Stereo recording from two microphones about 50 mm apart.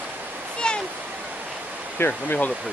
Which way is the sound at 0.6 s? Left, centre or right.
Centre.